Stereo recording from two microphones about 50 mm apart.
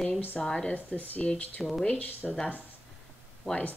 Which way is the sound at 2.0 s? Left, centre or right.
Left.